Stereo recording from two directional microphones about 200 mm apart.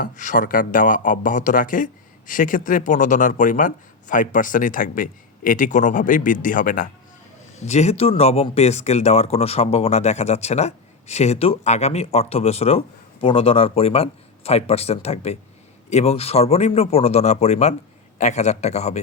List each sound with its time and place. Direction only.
0.0 s a man's voice: 40° left (ahead or behind)